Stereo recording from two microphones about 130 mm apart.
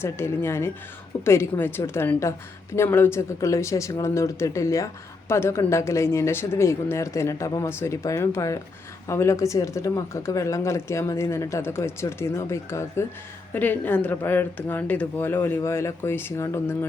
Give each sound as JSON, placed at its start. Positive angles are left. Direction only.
{"t": 0.0, "sound": "a woman's voice", "side_deg": 20}